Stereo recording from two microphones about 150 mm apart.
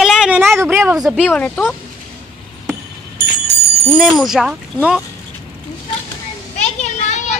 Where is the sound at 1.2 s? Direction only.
10° left (ahead or behind).